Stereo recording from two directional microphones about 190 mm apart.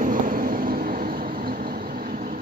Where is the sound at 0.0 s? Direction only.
45° right (ahead or behind).